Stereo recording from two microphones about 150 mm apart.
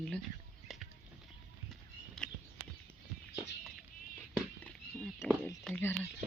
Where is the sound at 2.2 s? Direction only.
Centre (ahead or behind).